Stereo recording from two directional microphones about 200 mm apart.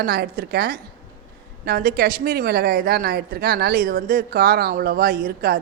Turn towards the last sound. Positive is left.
turn(degrees=-50)  # may be behind; listen again after turning